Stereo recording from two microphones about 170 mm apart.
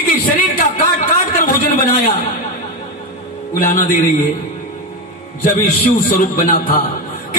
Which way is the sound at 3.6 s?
55° left (ahead or behind).